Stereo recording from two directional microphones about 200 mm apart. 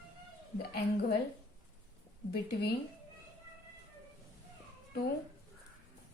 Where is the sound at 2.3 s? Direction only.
50° left (ahead or behind).